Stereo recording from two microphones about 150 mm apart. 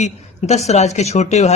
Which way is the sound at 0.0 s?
45° left (ahead or behind).